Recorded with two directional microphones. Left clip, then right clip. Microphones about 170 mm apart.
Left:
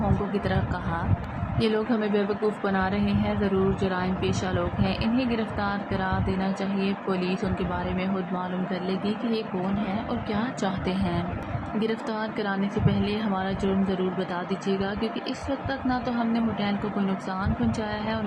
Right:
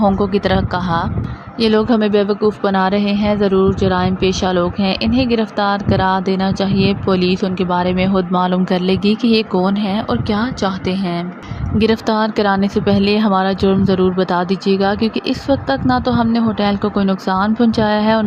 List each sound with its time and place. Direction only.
0.4 s a woman's voice: 55° right (ahead or behind); by 9.4 s 70° right (ahead or behind)
10.1 s speech: 50° right (ahead or behind)
11.8 s a woman's voice: 70° right (ahead or behind)